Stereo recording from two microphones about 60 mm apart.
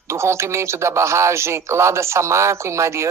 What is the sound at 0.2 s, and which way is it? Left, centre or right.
Speech, right.